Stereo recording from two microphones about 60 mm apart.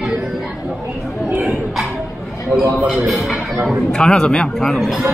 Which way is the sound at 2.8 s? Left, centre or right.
Centre.